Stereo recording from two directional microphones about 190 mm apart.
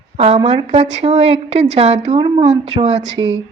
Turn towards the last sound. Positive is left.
turn(degrees=-80)